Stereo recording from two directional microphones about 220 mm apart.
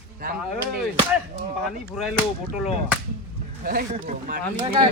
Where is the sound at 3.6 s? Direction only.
40° right (ahead or behind).